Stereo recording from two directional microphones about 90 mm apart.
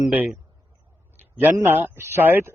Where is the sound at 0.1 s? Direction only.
20° right (ahead or behind).